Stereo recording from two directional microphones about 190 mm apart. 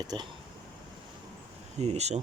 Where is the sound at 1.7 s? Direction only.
35° right (ahead or behind).